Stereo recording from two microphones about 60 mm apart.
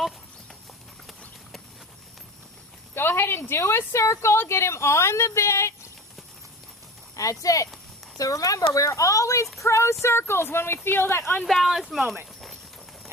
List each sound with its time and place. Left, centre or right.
2.9 s speech: left
7.2 s speech: left
11.4 s speech: centre